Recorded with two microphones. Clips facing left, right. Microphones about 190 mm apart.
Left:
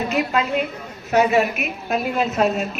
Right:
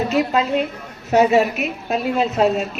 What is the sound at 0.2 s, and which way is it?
A woman's voice, 30° right (ahead or behind).